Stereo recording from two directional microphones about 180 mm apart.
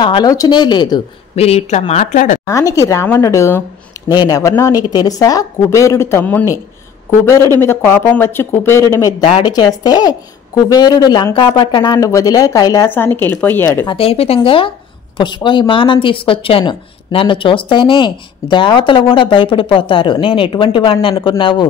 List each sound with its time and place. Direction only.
0.0 s speech: 25° left (ahead or behind)
1.4 s speech: 35° left (ahead or behind)
2.4 s a woman's voice: 15° left (ahead or behind)
13.8 s speech: 30° left (ahead or behind)